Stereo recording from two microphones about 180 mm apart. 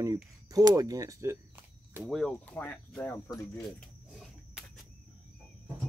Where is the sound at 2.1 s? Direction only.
5° left (ahead or behind).